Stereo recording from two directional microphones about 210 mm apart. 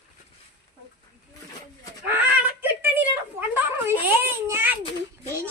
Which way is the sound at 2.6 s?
10° right (ahead or behind).